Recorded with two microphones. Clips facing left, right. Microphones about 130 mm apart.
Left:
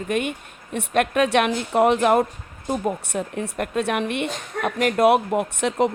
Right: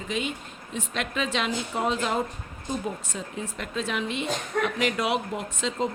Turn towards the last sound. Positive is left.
turn(degrees=60)  # may be behind; listen again after turning